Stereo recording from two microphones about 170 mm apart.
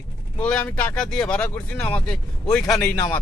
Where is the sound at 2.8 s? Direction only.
15° left (ahead or behind).